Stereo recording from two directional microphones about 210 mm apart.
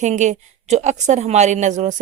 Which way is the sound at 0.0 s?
35° right (ahead or behind).